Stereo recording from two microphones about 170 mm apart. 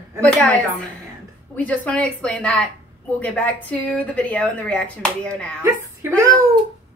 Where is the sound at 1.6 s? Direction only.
5° left (ahead or behind).